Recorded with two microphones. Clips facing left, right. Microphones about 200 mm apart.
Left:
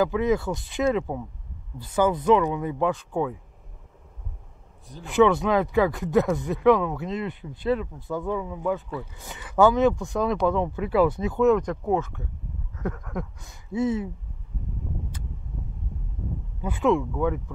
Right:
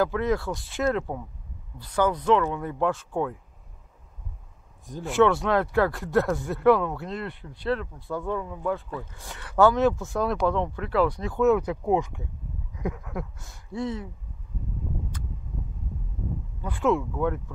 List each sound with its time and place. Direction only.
0.0 s speech: centre (ahead or behind)
2.2 s speech: 10° left (ahead or behind)
5.1 s speech: centre (ahead or behind)
16.6 s speech: centre (ahead or behind)